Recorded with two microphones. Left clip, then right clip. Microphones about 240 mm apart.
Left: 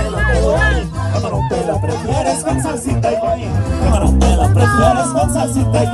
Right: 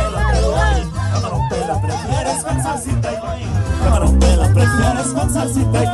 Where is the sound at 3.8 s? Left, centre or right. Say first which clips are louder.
Left 1 dB; left.